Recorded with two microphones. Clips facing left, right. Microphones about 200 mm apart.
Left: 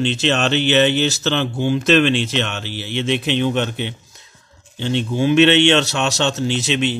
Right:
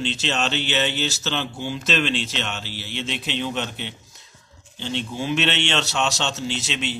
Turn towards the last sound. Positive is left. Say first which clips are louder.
# left 8 dB
turn(degrees=60)  # may be behind; listen again after turning